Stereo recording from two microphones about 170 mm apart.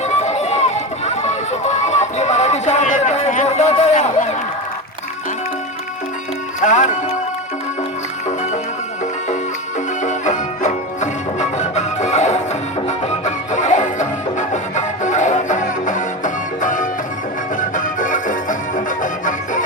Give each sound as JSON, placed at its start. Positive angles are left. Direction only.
{"t": 0.0, "sound": "run", "side_deg": 40}
{"t": 6.6, "sound": "speech", "side_deg": 45}
{"t": 10.0, "sound": "music", "side_deg": 45}